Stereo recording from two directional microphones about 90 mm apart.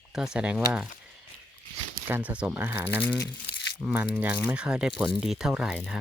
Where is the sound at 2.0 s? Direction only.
15° right (ahead or behind).